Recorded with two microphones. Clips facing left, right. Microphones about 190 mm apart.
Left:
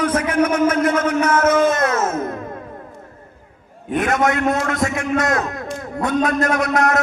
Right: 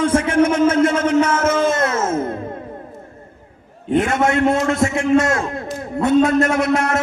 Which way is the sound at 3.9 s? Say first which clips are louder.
Right 2 dB; 25° right (ahead or behind).